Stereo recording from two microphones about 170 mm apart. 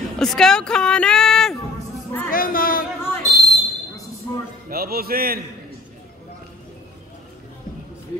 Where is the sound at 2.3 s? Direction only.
55° left (ahead or behind).